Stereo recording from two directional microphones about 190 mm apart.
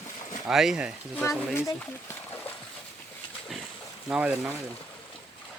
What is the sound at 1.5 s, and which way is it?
Speech, 15° left (ahead or behind).